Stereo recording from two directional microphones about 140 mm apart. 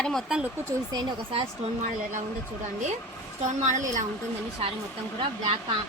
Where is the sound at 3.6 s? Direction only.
60° right (ahead or behind).